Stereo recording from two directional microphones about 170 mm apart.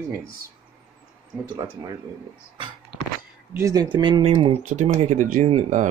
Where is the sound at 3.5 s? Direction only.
20° right (ahead or behind).